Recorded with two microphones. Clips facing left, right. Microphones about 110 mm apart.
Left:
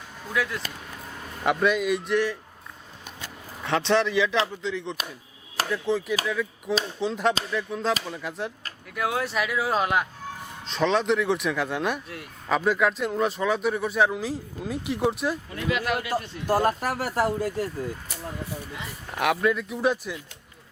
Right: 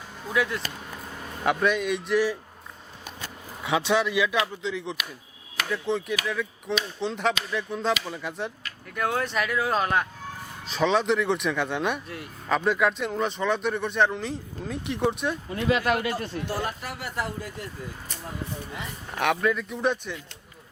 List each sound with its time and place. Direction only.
0.3 s speech: centre (ahead or behind)
3.6 s speech: 10° right (ahead or behind)
15.4 s speech: 30° right (ahead or behind)
15.8 s speech: 40° right (ahead or behind)
16.5 s speech: 40° left (ahead or behind)
19.1 s speech: centre (ahead or behind)